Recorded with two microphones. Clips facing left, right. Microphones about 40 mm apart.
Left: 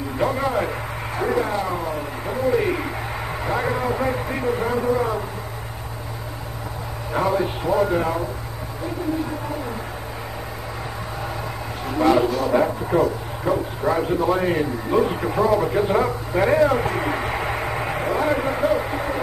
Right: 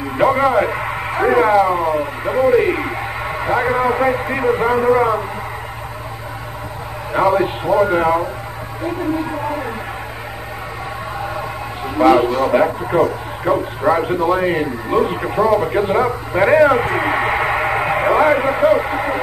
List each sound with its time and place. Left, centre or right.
0.2 s a man's voice: right
7.2 s a man's voice: right
11.8 s speech: right
16.4 s radio: right
18.0 s vehicle: right
18.4 s radio: right